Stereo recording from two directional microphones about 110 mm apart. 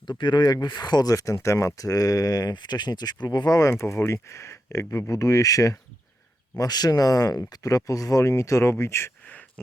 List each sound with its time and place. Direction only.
0.2 s speech: 40° left (ahead or behind); by 9.4 s 20° left (ahead or behind)